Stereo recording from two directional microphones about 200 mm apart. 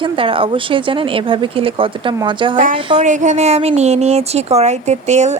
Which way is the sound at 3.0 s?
35° right (ahead or behind).